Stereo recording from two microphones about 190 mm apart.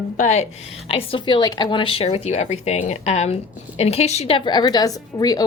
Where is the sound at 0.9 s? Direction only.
25° left (ahead or behind).